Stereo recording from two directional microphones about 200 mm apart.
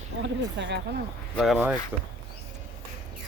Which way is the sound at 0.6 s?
65° right (ahead or behind).